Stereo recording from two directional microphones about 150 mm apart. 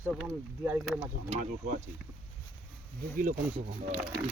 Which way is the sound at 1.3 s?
55° right (ahead or behind).